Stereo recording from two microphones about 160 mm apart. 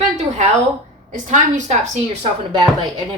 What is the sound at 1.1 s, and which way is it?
Speech, 50° right (ahead or behind).